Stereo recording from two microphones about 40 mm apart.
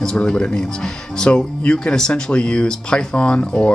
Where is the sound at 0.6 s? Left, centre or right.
Centre.